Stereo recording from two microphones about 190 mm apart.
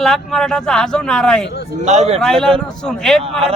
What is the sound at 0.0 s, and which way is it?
Speech, centre (ahead or behind).